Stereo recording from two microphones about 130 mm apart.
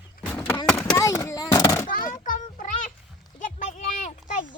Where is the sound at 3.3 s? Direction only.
80° left.